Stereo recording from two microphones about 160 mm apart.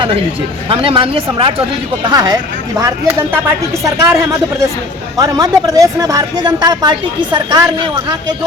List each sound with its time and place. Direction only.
0.7 s a woman's voice: 35° right (ahead or behind)
2.0 s a woman's voice: 25° right (ahead or behind)